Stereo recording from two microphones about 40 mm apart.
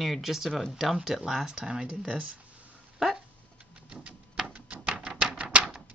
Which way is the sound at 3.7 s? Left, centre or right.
Right.